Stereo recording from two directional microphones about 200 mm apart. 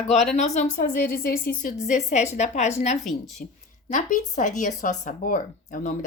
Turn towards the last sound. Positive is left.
turn(degrees=40)  # may be behind; listen again after turning